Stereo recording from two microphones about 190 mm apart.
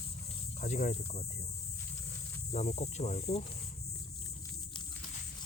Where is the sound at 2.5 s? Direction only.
35° left (ahead or behind).